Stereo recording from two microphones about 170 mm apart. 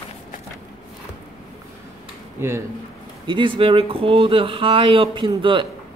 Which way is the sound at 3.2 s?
30° right (ahead or behind).